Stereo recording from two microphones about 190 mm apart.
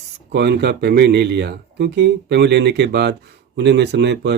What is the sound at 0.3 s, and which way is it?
Speech, 60° right (ahead or behind).